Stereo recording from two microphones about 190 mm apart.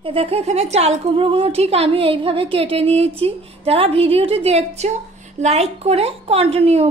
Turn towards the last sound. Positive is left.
turn(degrees=-30)  # may be behind; listen again after turning